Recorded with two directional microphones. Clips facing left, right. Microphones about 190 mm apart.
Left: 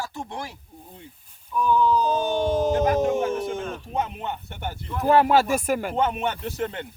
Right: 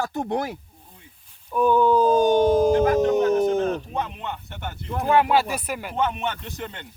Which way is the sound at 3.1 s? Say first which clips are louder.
Right 6 dB; 40° right (ahead or behind).